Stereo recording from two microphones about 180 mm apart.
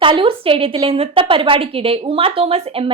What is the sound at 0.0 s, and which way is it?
A woman's voice, 30° right (ahead or behind).